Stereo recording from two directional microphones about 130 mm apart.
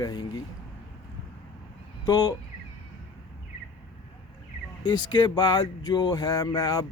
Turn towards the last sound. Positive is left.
turn(degrees=30)  # may be behind; listen again after turning